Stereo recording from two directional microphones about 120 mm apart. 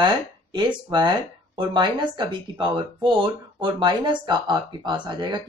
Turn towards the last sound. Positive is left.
turn(degrees=-40)  # may be behind; listen again after turning